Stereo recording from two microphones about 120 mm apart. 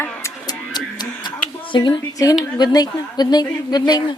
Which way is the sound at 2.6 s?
35° left (ahead or behind).